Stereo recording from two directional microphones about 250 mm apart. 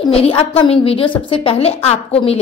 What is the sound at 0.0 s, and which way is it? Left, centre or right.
A woman's voice, left.